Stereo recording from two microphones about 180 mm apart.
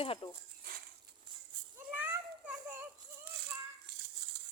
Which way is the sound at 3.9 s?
70° right (ahead or behind).